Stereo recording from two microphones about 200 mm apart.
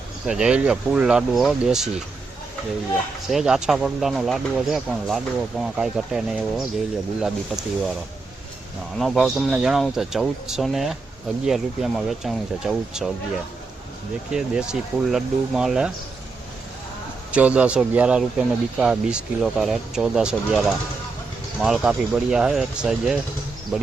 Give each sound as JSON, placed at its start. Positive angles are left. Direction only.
{"t": 0.3, "sound": "speech", "side_deg": -5}
{"t": 3.2, "sound": "speech", "side_deg": -5}
{"t": 9.0, "sound": "speech", "side_deg": 0}
{"t": 14.3, "sound": "speech", "side_deg": -5}
{"t": 17.3, "sound": "speech", "side_deg": -5}